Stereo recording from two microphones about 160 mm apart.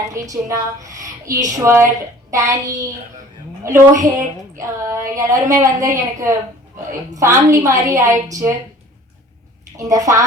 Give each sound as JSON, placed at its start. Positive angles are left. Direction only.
{"t": 0.1, "sound": "a woman's voice", "side_deg": -20}
{"t": 9.7, "sound": "a woman's voice", "side_deg": -20}